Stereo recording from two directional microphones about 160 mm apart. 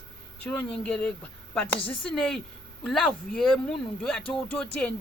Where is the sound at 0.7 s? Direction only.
5° left (ahead or behind).